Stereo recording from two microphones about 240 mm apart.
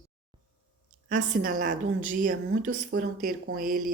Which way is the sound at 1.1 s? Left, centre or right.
Right.